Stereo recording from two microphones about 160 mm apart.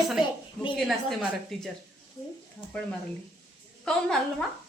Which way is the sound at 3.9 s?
5° left (ahead or behind).